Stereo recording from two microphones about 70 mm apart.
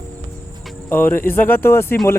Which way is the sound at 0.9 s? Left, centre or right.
Left.